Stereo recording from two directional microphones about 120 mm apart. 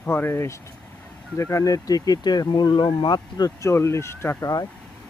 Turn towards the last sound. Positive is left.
turn(degrees=20)  # may be behind; listen again after turning